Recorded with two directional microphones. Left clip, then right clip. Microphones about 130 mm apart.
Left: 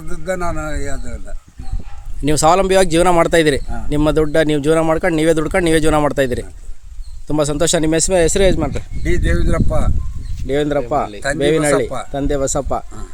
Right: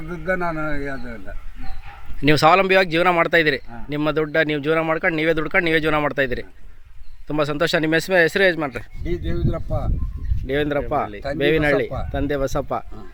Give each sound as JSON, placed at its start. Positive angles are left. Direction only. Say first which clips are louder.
{"t": 0.3, "sound": "a man's voice", "louder": "left 2 dB", "side_deg": 30}
{"t": 2.2, "sound": "speech", "louder": "left 2 dB", "side_deg": 35}